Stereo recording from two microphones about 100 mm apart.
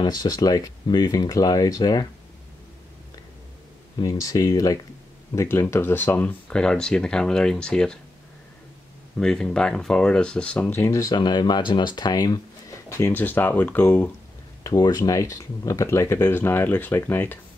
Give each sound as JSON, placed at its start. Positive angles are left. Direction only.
{"t": 0.0, "sound": "speech", "side_deg": 40}
{"t": 4.0, "sound": "speech", "side_deg": 35}
{"t": 6.5, "sound": "speech", "side_deg": 10}
{"t": 9.2, "sound": "speech", "side_deg": 5}
{"t": 10.7, "sound": "speech", "side_deg": 25}
{"t": 11.1, "sound": "speech", "side_deg": 45}
{"t": 13.1, "sound": "speech", "side_deg": 20}
{"t": 14.6, "sound": "speech", "side_deg": 40}